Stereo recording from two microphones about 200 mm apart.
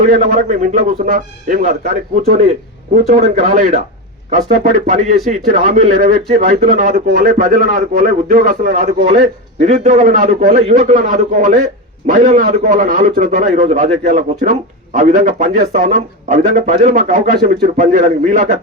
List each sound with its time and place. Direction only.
0.1 s a man's voice: 40° right (ahead or behind)